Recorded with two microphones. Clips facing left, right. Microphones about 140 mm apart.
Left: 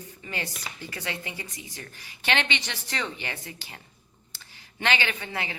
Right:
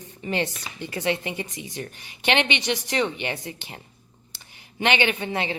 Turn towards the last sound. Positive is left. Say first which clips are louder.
# right 7 dB
turn(degrees=-20)  # may be behind; listen again after turning